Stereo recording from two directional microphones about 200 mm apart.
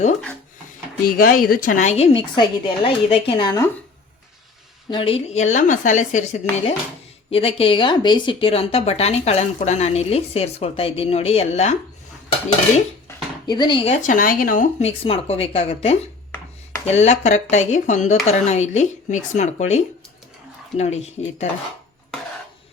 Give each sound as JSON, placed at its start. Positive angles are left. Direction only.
{"t": 1.0, "sound": "speech", "side_deg": 45}
{"t": 4.9, "sound": "speech", "side_deg": 25}
{"t": 13.1, "sound": "speech", "side_deg": 20}